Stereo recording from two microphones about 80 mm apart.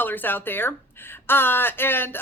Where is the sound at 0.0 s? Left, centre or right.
Left.